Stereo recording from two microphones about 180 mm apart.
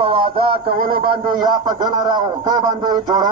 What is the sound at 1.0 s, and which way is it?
A man's voice, 25° right (ahead or behind).